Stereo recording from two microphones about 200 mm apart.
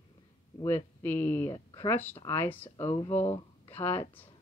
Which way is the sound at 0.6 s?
10° left (ahead or behind).